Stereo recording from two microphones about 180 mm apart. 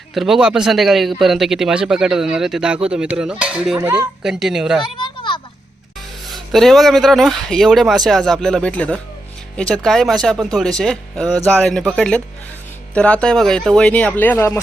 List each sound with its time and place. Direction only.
0.1 s speech: centre (ahead or behind)
4.9 s a sound: 25° left (ahead or behind)
6.3 s speech: centre (ahead or behind)